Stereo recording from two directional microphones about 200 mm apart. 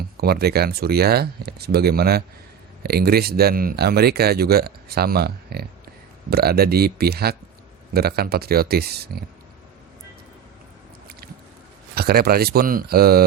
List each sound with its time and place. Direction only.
0.2 s speech: 50° right (ahead or behind)
11.9 s speech: 50° right (ahead or behind)